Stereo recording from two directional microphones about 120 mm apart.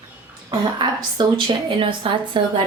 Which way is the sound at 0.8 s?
40° right (ahead or behind).